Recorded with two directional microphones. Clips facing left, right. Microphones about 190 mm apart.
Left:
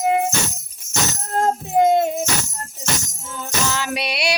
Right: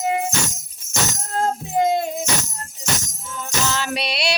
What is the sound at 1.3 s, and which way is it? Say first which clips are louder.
Music: left 4 dB; 55° left (ahead or behind).